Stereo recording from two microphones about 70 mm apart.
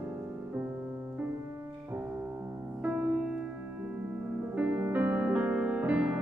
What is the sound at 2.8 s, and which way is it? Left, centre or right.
Music, centre.